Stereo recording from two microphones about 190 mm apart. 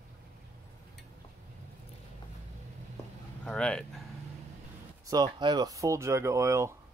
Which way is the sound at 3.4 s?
5° left (ahead or behind).